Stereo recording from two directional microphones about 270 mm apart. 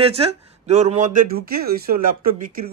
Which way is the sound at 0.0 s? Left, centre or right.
Right.